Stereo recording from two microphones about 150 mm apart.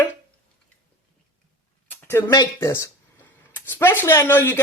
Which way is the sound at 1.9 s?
15° left (ahead or behind).